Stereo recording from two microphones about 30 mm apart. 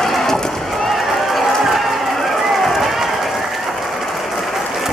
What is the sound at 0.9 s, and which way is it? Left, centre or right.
Run, centre.